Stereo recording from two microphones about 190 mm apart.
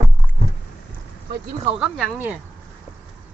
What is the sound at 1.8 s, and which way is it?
Speech, 5° right (ahead or behind).